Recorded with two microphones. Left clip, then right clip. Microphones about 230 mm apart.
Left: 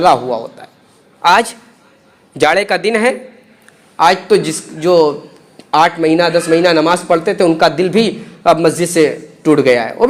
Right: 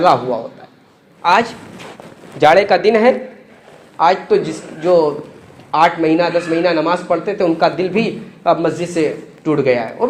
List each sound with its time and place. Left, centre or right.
0.0 s a man's voice: left